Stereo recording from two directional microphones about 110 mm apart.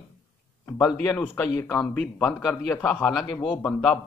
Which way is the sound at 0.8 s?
15° left (ahead or behind).